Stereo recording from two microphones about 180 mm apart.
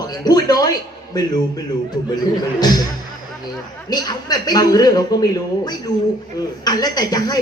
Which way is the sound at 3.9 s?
20° left (ahead or behind).